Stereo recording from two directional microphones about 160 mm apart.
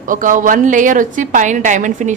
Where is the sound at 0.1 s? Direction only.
55° right (ahead or behind).